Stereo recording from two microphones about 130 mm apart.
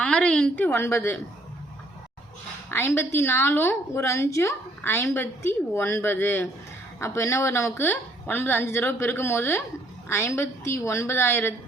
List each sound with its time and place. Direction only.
0.0 s a woman's voice: 10° left (ahead or behind)
2.6 s a woman's voice: 20° left (ahead or behind)